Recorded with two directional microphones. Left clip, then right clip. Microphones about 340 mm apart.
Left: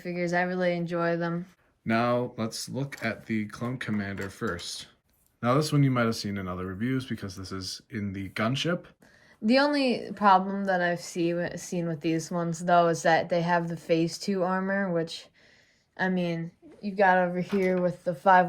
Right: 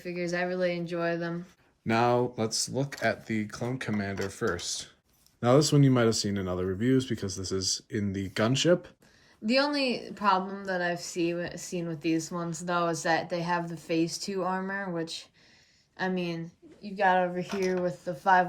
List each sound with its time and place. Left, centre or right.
0.0 s a woman's voice: centre
1.9 s speech: centre
9.5 s a woman's voice: centre